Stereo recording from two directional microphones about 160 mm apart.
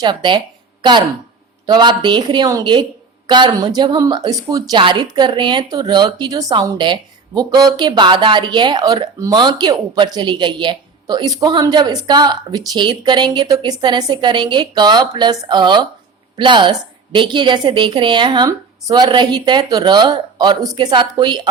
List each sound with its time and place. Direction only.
0.0 s speech: 30° right (ahead or behind)